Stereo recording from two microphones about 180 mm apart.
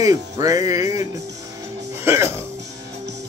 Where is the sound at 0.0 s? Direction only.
20° right (ahead or behind).